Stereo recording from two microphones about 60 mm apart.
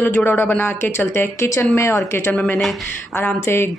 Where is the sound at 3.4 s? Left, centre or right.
Left.